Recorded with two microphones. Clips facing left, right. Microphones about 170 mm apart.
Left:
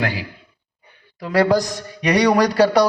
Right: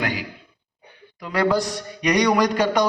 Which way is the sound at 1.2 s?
40° left (ahead or behind).